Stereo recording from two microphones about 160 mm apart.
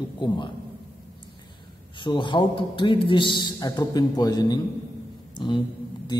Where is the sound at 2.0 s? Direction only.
30° left (ahead or behind).